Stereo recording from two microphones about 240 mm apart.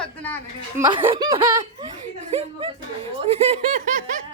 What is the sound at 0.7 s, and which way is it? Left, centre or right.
Laughter, centre.